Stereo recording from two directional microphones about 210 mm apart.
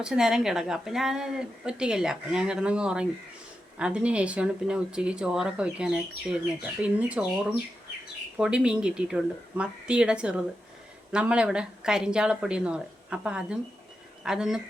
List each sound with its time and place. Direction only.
0.0 s a woman's voice: 5° right (ahead or behind)